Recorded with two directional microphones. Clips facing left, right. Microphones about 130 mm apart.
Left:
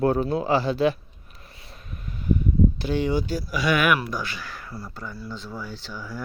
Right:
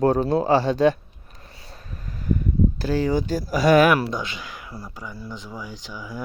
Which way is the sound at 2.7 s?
40° right (ahead or behind).